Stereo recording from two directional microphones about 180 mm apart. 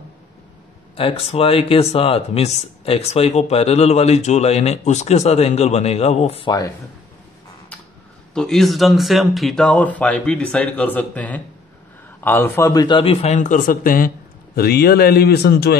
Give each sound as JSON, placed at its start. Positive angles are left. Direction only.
{"t": 0.9, "sound": "speech", "side_deg": 30}
{"t": 8.4, "sound": "a man's voice", "side_deg": 0}